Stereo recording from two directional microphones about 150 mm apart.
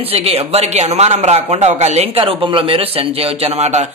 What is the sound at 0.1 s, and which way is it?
A man's voice, 40° right (ahead or behind).